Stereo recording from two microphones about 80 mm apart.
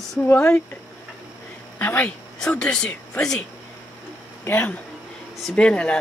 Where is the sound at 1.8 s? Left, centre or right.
Left.